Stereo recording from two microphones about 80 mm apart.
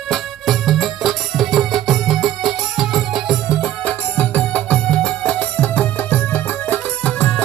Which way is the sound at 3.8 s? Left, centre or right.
Centre.